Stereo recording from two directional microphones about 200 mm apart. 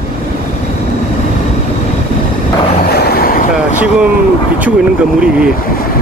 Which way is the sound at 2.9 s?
50° left (ahead or behind).